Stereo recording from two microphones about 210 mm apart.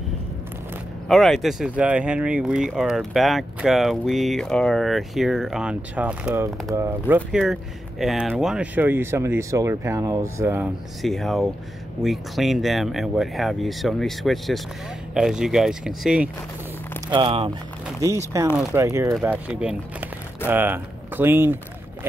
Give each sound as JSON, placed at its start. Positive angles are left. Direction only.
{"t": 1.0, "sound": "speech", "side_deg": 0}
{"t": 11.0, "sound": "speech", "side_deg": 0}
{"t": 17.1, "sound": "speech", "side_deg": -25}
{"t": 18.0, "sound": "speech", "side_deg": -15}